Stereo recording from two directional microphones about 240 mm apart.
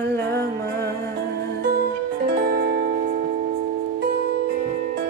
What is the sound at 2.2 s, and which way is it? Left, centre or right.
Music, right.